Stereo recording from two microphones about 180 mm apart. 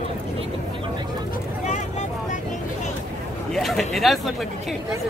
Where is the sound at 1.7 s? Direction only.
40° left (ahead or behind).